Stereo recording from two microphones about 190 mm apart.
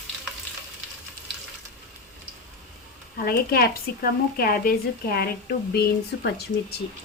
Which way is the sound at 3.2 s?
55° left (ahead or behind).